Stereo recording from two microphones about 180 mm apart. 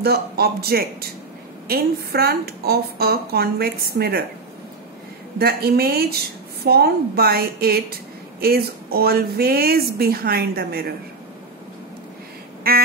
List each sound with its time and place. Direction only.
0.0 s speech: 60° right (ahead or behind)
5.4 s speech: 60° right (ahead or behind)
12.7 s speech: 60° right (ahead or behind)